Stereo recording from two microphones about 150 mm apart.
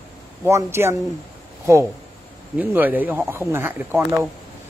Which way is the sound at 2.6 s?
10° right (ahead or behind).